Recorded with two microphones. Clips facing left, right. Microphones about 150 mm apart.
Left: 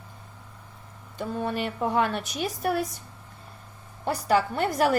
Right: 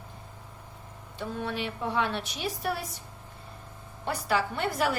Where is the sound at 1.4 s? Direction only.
45° left (ahead or behind).